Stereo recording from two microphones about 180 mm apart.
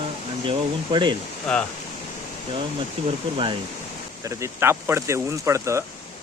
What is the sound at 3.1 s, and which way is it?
Speech, 30° right (ahead or behind).